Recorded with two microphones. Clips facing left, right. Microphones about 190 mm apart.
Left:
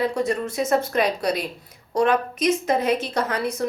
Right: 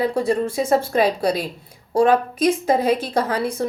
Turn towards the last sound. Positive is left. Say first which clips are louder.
# right 3 dB
turn(degrees=-30)  # may be behind; listen again after turning